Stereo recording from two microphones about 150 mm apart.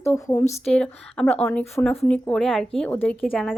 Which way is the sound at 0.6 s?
5° left (ahead or behind).